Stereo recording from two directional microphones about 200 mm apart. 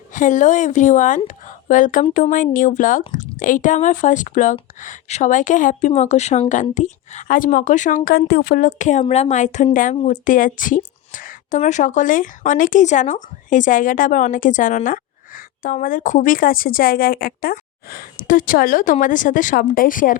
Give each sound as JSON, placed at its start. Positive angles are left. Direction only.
{"t": 0.1, "sound": "a woman's voice", "side_deg": 40}